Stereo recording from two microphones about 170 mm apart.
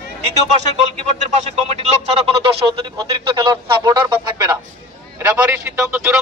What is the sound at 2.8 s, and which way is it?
A man's voice, 25° right (ahead or behind).